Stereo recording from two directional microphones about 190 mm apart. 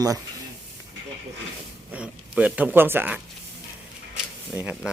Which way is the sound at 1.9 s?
5° right (ahead or behind).